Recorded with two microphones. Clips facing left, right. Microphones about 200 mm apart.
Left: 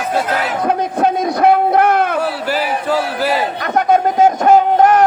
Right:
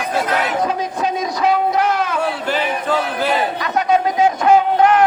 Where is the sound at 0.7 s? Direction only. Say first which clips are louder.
Left 5 dB; 55° left (ahead or behind).